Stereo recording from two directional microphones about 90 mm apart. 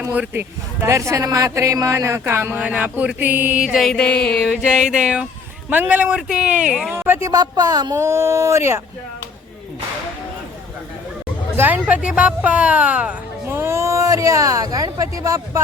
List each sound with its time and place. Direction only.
0.1 s a man's voice: 20° right (ahead or behind)
0.9 s speech: 35° right (ahead or behind); by 3.6 s 20° right (ahead or behind)
3.6 s speech: 10° right (ahead or behind)
3.8 s music: 10° left (ahead or behind)
4.4 s speech: 5° right (ahead or behind)
6.9 s a man's voice: 30° right (ahead or behind)
7.3 s a woman's voice: 45° right (ahead or behind)
7.9 s speech: 35° right (ahead or behind)
11.5 s speech: 20° right (ahead or behind)
13.5 s speech: 30° right (ahead or behind)